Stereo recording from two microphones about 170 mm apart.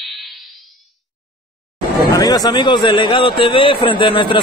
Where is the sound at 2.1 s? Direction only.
20° left (ahead or behind).